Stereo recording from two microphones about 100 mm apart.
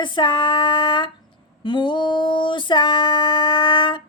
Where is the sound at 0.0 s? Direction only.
50° left (ahead or behind).